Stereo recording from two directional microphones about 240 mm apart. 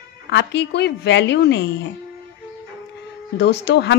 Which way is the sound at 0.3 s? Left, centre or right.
Left.